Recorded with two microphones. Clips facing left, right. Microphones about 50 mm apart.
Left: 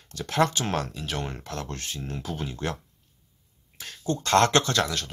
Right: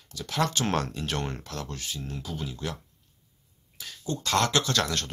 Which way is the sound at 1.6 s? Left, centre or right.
Left.